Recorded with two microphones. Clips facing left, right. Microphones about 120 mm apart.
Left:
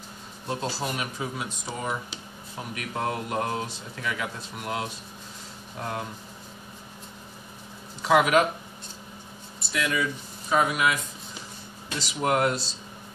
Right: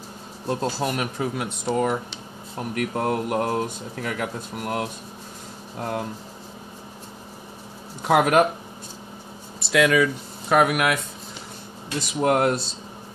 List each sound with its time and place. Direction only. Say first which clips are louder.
0.5 s speech: right 5 dB; 45° right (ahead or behind)
2.7 s speech: right 6 dB; 45° right (ahead or behind)
8.0 s speech: right 3 dB; 55° right (ahead or behind)
9.6 s speech: right 9 dB; 90° right
10.5 s speech: right 4 dB; 65° right (ahead or behind)
12.0 s speech: right 4 dB; 50° right (ahead or behind)